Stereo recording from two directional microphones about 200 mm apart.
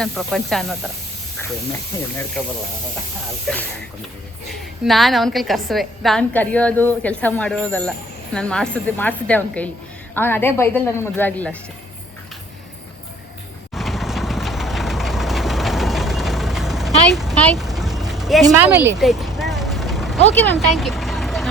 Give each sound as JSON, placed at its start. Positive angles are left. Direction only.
{"t": 0.0, "sound": "a woman's voice", "side_deg": 0}
{"t": 3.4, "sound": "a woman's voice", "side_deg": 5}
{"t": 13.7, "sound": "vehicle", "side_deg": 0}
{"t": 17.2, "sound": "a sound", "side_deg": 0}
{"t": 18.4, "sound": "a woman's voice", "side_deg": -10}
{"t": 19.4, "sound": "vehicle", "side_deg": 0}
{"t": 20.3, "sound": "a woman's voice", "side_deg": 10}
{"t": 20.7, "sound": "vehicle", "side_deg": 0}